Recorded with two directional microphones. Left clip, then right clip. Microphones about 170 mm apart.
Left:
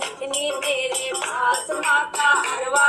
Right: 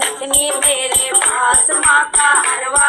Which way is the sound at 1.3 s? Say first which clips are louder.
Right 4 dB; 35° right (ahead or behind).